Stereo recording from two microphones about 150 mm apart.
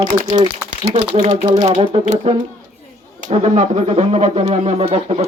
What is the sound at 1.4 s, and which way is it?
Speech, 35° right (ahead or behind).